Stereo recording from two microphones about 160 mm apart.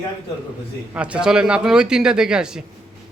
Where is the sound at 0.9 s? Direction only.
5° right (ahead or behind).